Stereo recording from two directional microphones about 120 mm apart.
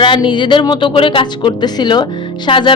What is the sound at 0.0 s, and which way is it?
Speech, 40° left (ahead or behind).